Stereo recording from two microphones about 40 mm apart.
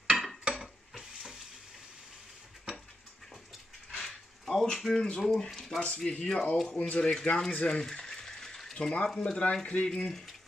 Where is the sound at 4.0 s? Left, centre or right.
Centre.